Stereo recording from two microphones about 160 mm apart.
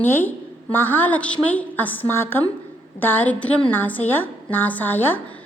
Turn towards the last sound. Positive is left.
turn(degrees=10)  # may be behind; listen again after turning